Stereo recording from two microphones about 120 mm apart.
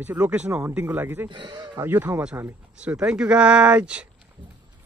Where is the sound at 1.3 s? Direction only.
40° right (ahead or behind).